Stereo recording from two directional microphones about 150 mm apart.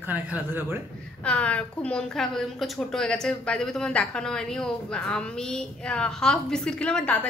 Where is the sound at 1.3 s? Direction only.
10° left (ahead or behind).